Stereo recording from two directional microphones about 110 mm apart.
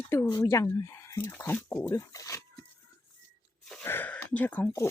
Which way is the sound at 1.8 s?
30° left (ahead or behind).